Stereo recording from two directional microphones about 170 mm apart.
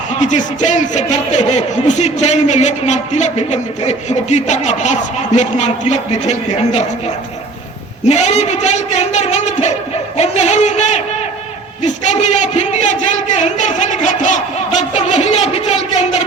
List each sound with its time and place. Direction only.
0.2 s speech: 45° left (ahead or behind)
8.0 s speech: 40° left (ahead or behind)